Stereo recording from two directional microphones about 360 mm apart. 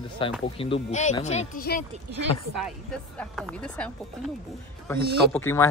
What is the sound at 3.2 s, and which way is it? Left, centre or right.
Speech, centre.